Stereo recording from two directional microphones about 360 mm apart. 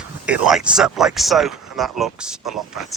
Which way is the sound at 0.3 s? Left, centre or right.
Centre.